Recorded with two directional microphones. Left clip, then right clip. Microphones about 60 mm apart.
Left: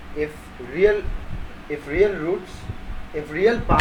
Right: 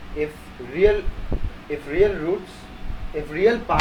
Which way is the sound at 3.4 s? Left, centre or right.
Centre.